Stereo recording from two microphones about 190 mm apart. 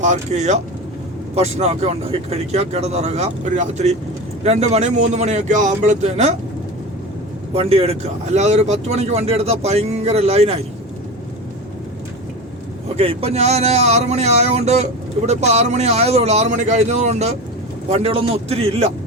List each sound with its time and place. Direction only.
0.0 s speech: 40° right (ahead or behind)
7.5 s speech: 30° right (ahead or behind)
13.0 s speech: 30° right (ahead or behind)